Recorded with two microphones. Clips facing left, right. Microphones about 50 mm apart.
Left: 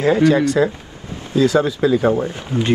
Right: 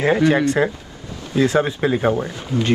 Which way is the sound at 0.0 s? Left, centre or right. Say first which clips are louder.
Left 2 dB; right.